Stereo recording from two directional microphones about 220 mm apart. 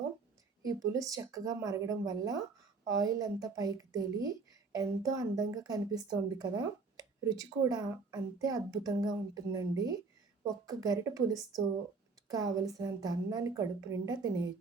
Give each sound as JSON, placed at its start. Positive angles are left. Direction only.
{"t": 0.6, "sound": "a child's voice", "side_deg": -15}